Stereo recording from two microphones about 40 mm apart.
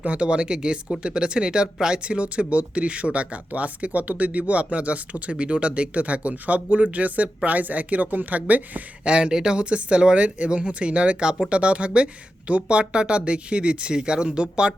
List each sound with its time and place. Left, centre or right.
0.0 s speech: right
9.0 s speech: right